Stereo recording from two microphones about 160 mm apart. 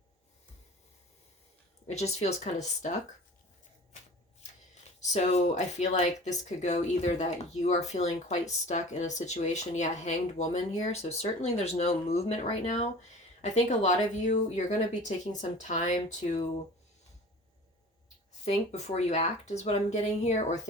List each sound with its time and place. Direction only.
1.9 s speech: 45° left (ahead or behind)
4.9 s speech: 45° left (ahead or behind)
18.4 s speech: 45° left (ahead or behind)